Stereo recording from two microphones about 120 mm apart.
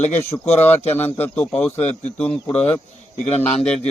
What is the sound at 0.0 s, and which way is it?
Speech, 65° left (ahead or behind).